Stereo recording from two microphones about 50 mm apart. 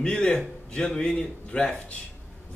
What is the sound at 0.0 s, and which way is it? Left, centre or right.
A man's voice, centre.